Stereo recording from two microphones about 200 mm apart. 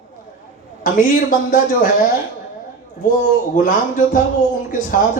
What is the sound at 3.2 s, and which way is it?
A man's voice, 40° left (ahead or behind).